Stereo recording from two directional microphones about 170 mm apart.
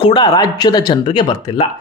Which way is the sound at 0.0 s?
25° left (ahead or behind).